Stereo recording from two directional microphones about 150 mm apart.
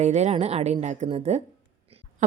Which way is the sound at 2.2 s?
55° right (ahead or behind).